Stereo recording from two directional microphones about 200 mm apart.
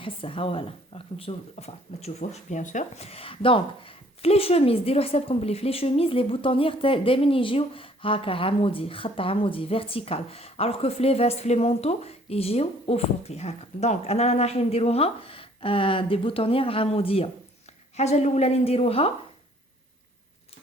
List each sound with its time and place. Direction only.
0.0 s a woman's voice: 25° left (ahead or behind)